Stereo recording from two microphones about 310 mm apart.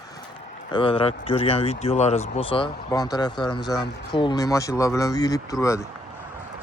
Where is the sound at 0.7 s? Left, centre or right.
Centre.